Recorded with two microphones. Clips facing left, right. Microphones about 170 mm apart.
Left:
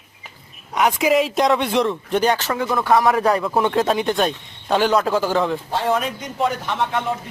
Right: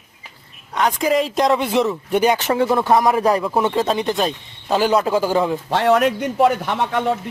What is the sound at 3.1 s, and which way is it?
Speech, 10° right (ahead or behind).